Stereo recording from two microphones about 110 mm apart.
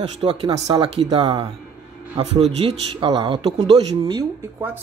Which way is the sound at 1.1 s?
50° right (ahead or behind).